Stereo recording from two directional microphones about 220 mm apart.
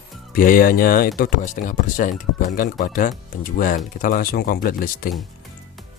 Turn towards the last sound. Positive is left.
turn(degrees=40)  # may be behind; listen again after turning